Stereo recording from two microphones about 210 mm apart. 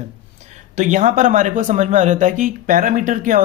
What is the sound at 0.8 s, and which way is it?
Speech, 35° right (ahead or behind).